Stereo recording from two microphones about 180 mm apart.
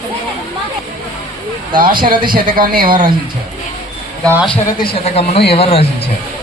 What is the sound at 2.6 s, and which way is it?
Speech, 50° right (ahead or behind).